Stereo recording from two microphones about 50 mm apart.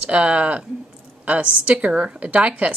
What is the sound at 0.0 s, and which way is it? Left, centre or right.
A woman's voice, right.